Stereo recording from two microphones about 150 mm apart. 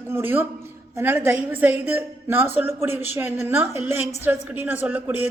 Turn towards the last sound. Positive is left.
turn(degrees=-10)  # may be behind; listen again after turning